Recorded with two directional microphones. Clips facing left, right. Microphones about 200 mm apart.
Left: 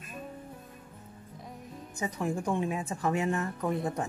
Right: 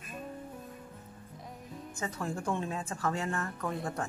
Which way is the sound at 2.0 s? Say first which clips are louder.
Left 5 dB; 15° left (ahead or behind).